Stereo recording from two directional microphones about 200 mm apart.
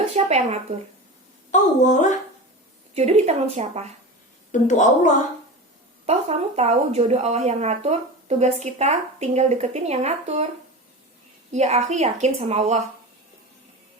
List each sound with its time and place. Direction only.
0.0 s speech: 35° right (ahead or behind)
1.5 s a woman's voice: 40° left (ahead or behind)
2.9 s speech: 35° right (ahead or behind)
4.5 s a woman's voice: 40° left (ahead or behind)
6.1 s speech: 35° right (ahead or behind)
11.5 s speech: 35° right (ahead or behind)